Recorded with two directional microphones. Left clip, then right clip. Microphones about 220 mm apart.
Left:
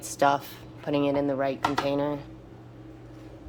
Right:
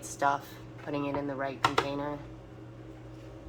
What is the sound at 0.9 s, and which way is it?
A woman's voice, 45° left (ahead or behind).